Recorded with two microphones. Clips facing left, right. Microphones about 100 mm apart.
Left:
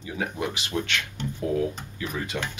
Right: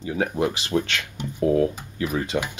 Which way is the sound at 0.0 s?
40° right (ahead or behind).